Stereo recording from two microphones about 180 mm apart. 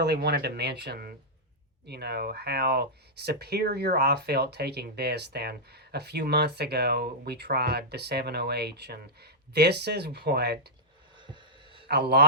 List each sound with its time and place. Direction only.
0.0 s speech: 65° right (ahead or behind)
11.2 s a sound: 25° right (ahead or behind)
11.9 s speech: 65° right (ahead or behind)